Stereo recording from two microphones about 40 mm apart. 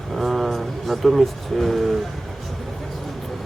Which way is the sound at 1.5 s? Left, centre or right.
Centre.